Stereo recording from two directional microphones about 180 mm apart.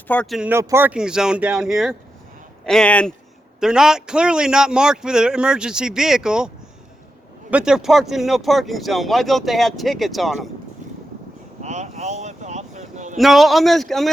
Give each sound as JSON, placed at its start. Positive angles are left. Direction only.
{"t": 0.1, "sound": "speech", "side_deg": 5}
{"t": 0.5, "sound": "speech", "side_deg": -15}
{"t": 7.5, "sound": "speech", "side_deg": -5}
{"t": 11.6, "sound": "a sound", "side_deg": -40}
{"t": 13.1, "sound": "speech", "side_deg": 0}